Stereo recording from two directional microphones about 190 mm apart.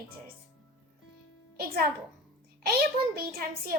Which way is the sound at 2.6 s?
50° right (ahead or behind).